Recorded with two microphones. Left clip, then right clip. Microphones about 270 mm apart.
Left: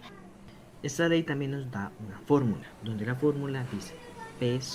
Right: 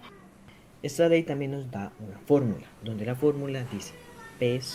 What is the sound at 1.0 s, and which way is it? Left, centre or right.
Speech, right.